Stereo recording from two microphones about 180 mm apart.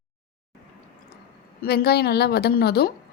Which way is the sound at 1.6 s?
65° left (ahead or behind).